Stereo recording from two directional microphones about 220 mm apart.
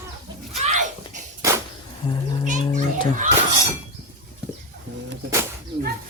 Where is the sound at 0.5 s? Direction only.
30° right (ahead or behind).